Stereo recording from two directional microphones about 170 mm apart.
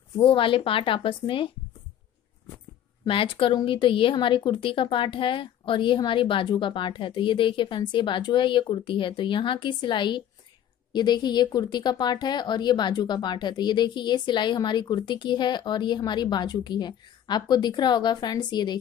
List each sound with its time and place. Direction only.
0.2 s speech: 30° left (ahead or behind)
3.1 s speech: 30° left (ahead or behind)